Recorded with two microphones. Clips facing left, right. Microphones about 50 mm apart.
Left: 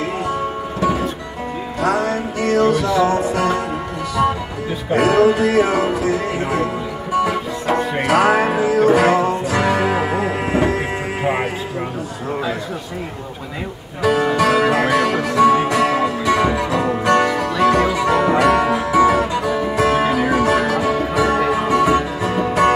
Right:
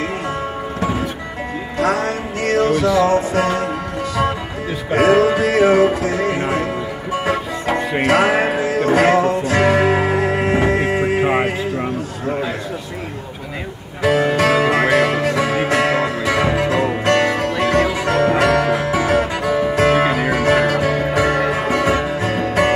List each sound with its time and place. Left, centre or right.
1.8 s music: right
4.9 s music: right
7.6 s music: right
8.1 s music: right
9.7 s music: right
14.0 s music: right